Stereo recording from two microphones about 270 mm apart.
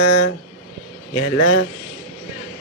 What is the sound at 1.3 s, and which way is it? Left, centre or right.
Speech, left.